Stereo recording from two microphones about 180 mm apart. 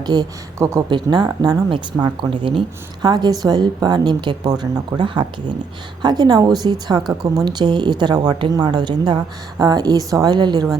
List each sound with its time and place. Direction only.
0.0 s a woman's voice: 20° right (ahead or behind)
7.0 s speech: centre (ahead or behind)
7.3 s a woman's voice: 25° right (ahead or behind)